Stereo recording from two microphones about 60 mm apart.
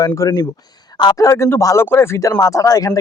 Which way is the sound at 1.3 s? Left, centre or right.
Left.